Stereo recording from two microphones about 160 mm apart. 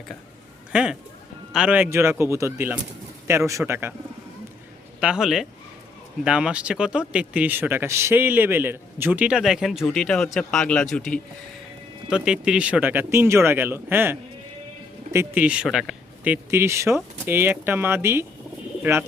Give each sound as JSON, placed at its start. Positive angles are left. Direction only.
{"t": 0.7, "sound": "a man's voice", "side_deg": -5}
{"t": 4.9, "sound": "a man's voice", "side_deg": -5}